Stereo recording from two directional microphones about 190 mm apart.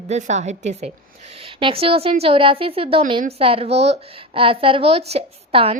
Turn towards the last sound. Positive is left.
turn(degrees=-30)  # may be behind; listen again after turning